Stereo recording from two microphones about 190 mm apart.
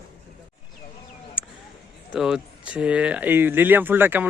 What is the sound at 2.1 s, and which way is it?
Speech, 5° right (ahead or behind).